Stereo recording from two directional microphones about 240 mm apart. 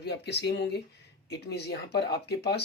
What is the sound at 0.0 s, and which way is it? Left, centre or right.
Speech, left.